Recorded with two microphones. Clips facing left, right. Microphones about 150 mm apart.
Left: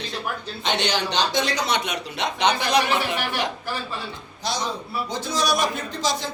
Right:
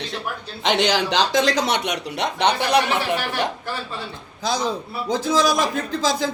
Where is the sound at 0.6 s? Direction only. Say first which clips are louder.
Right 5 dB; 90° right; by 2.8 s 60° right (ahead or behind).